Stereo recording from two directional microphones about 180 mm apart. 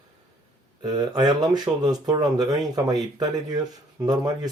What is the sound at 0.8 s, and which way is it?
Speech, 20° right (ahead or behind).